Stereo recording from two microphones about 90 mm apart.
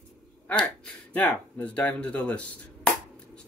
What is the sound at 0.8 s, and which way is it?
A man's voice, 15° left (ahead or behind).